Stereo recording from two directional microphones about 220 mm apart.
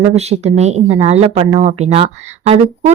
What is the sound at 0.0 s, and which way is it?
Speech, 30° right (ahead or behind).